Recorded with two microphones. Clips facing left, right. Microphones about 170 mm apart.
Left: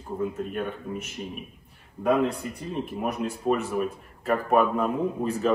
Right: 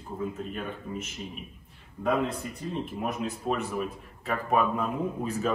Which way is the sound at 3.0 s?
Centre (ahead or behind).